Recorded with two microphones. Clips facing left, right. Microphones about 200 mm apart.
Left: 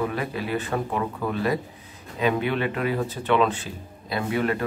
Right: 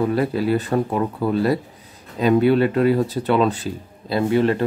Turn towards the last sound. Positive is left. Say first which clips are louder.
# right 7 dB
turn(degrees=-30)  # may be behind; listen again after turning